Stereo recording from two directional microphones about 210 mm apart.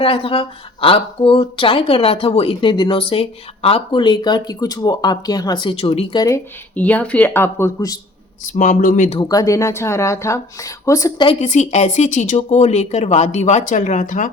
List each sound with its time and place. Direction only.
0.0 s speech: 25° left (ahead or behind)
6.2 s speech: 10° left (ahead or behind)
8.4 s speech: 35° left (ahead or behind)
9.1 s speech: 20° left (ahead or behind); by 14.3 s 40° left (ahead or behind)